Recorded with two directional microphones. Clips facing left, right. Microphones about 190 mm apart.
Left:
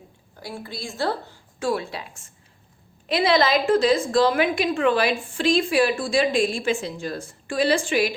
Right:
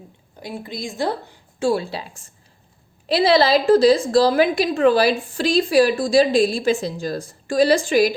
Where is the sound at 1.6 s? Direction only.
30° right (ahead or behind).